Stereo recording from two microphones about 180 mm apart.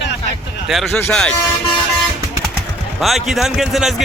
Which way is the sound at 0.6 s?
Centre (ahead or behind).